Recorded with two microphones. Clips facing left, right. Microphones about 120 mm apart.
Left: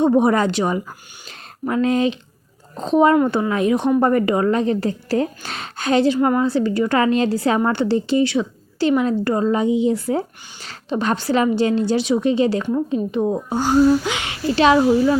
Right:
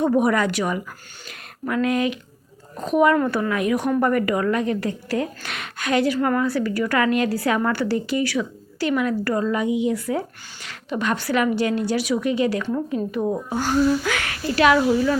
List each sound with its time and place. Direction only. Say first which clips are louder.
0.0 s a woman's voice: left 3 dB; 25° left (ahead or behind)
1.3 s a sound: left 3 dB; 25° left (ahead or behind)
2.7 s a woman's voice: left 3 dB; 25° left (ahead or behind)